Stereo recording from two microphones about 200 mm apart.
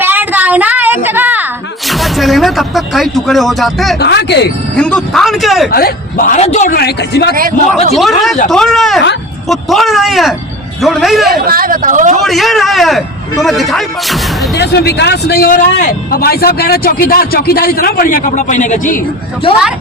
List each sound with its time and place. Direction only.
0.0 s a sound: 10° right (ahead or behind)
1.9 s speech: centre (ahead or behind)
4.0 s speech: 60° left (ahead or behind)
4.8 s speech: 5° left (ahead or behind)
5.7 s a man's voice: 45° left (ahead or behind)
6.7 s speech: 55° left (ahead or behind)
7.9 s speech: centre (ahead or behind)
11.4 s speech: 45° right (ahead or behind)
12.2 s speech: centre (ahead or behind)
14.5 s speech: 55° left (ahead or behind); by 19.0 s 40° left (ahead or behind)